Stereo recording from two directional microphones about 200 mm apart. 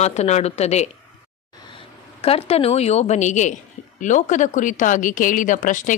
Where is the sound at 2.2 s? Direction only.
30° left (ahead or behind).